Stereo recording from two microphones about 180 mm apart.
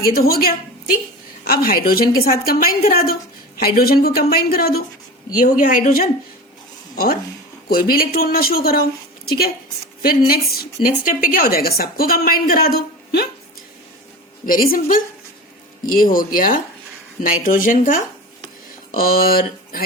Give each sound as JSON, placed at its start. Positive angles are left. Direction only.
{"t": 0.1, "sound": "a woman's voice", "side_deg": 55}
{"t": 6.9, "sound": "a woman's voice", "side_deg": 55}
{"t": 10.0, "sound": "a woman's voice", "side_deg": 55}
{"t": 14.4, "sound": "speech", "side_deg": 50}